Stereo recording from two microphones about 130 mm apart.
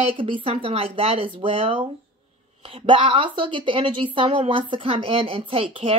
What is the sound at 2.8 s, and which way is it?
Speech, 45° right (ahead or behind).